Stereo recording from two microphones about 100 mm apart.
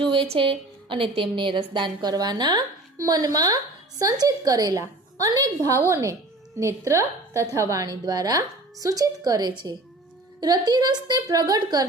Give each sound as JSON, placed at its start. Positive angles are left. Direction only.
{"t": 0.1, "sound": "a woman's voice", "side_deg": -60}